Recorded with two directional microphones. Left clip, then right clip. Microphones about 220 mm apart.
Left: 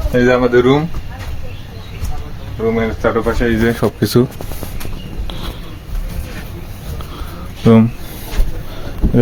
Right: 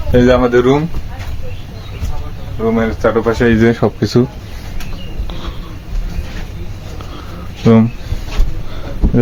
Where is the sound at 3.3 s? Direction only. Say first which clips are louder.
Right 4 dB; 40° right (ahead or behind).